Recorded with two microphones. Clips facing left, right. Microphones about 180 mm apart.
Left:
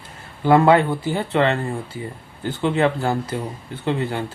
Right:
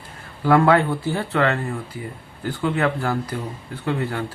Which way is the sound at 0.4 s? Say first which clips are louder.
Left 2 dB; 20° left (ahead or behind).